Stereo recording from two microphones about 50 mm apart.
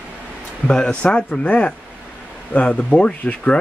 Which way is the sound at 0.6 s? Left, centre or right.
Centre.